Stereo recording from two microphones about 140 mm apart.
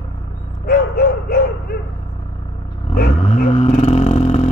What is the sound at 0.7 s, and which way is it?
Dog, 90° left.